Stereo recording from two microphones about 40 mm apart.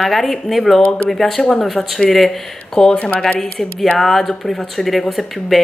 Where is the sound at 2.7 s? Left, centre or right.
Centre.